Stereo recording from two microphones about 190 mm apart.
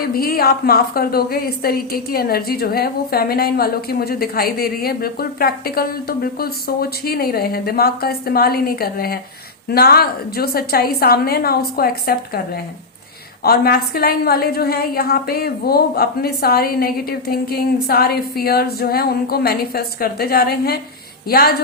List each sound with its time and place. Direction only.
0.0 s a woman's voice: 50° left (ahead or behind)
13.4 s a woman's voice: 55° left (ahead or behind)